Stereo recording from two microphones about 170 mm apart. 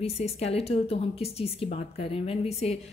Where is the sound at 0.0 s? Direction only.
40° left (ahead or behind).